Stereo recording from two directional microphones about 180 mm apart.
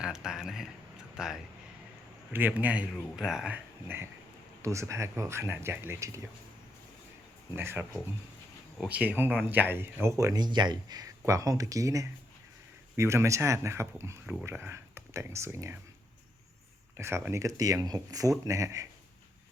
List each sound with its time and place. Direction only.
0.0 s a sound: 5° right (ahead or behind)
1.1 s speech: 5° right (ahead or behind)
7.5 s speech: 10° right (ahead or behind)
17.0 s speech: 15° right (ahead or behind)